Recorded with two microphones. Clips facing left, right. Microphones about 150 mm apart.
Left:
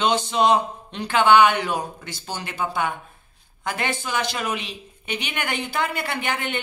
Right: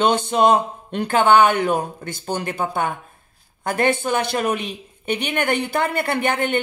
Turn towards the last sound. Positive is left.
turn(degrees=-50)  # may be behind; listen again after turning